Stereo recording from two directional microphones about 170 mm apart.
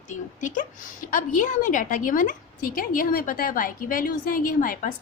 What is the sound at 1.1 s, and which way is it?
A woman's voice, 50° left (ahead or behind).